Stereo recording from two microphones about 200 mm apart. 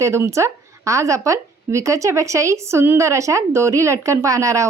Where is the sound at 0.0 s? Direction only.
15° right (ahead or behind).